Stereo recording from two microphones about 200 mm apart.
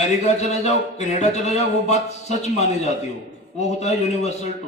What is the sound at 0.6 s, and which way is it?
A man's voice, 35° left (ahead or behind).